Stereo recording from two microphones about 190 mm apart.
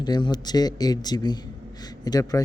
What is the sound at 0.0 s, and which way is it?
A man's voice, 20° left (ahead or behind).